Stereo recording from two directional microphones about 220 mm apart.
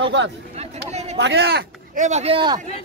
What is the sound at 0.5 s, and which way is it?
Speech, 30° right (ahead or behind).